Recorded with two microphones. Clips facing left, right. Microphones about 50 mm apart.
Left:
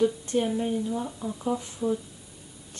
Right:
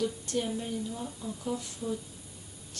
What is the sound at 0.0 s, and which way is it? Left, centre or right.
Speech, left.